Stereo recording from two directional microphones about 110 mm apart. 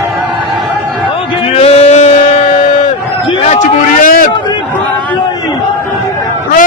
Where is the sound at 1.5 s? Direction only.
70° left (ahead or behind); by 2.6 s 90° left.